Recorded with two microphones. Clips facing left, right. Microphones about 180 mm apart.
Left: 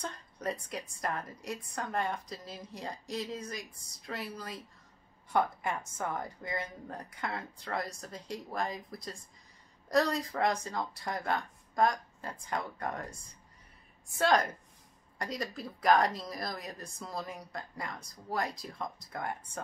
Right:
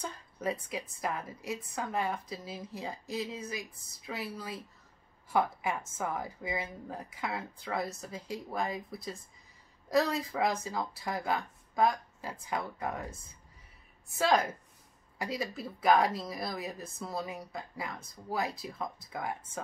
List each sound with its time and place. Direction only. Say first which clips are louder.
0.0 s a woman's voice: right 2 dB; 5° right (ahead or behind)
14.1 s a woman's voice: even; 5° right (ahead or behind)